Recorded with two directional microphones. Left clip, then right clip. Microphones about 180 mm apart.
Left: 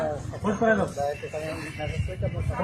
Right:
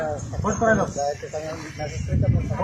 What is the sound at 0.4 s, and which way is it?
Speech, 30° right (ahead or behind).